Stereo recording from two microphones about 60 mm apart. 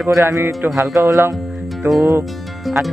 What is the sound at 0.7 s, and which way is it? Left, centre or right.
Speech, right.